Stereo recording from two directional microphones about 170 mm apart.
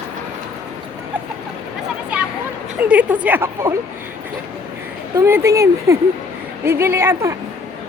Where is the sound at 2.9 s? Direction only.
10° right (ahead or behind).